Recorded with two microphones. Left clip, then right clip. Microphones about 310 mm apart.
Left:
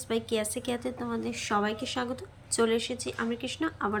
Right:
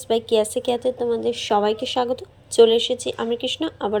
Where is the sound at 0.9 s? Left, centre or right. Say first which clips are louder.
Right 13 dB; right.